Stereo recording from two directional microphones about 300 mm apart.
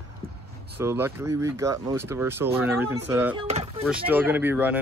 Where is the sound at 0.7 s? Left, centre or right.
Centre.